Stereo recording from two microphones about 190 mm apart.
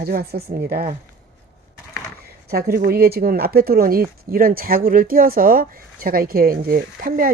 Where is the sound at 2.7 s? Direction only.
50° right (ahead or behind).